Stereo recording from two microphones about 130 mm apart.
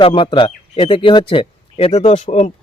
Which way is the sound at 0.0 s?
40° left (ahead or behind).